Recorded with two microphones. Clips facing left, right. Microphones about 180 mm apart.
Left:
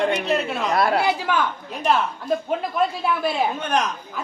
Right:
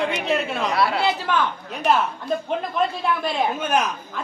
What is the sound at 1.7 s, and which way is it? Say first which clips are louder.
Speech: right 1 dB; centre (ahead or behind).